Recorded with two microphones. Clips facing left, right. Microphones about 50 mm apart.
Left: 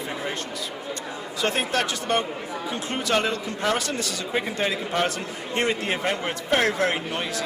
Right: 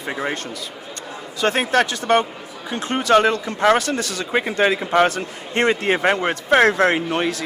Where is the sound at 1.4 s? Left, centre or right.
Right.